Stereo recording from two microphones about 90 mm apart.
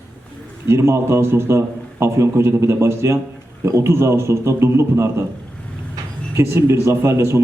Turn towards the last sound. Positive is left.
turn(degrees=-30)  # may be behind; listen again after turning